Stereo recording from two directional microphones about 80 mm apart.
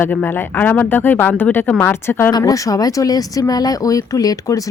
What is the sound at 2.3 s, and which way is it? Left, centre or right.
Speech, left.